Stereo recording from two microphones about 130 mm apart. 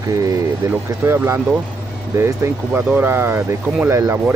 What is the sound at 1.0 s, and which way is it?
Speech, 20° right (ahead or behind).